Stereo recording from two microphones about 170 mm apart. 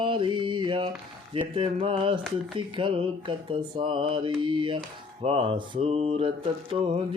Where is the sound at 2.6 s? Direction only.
30° right (ahead or behind).